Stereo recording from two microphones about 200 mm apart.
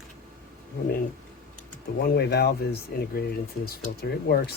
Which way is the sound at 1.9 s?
55° left (ahead or behind).